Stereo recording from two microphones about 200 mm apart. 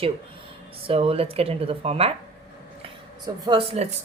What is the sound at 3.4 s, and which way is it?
Speech, 30° right (ahead or behind).